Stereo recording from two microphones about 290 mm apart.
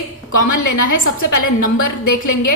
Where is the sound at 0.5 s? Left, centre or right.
Left.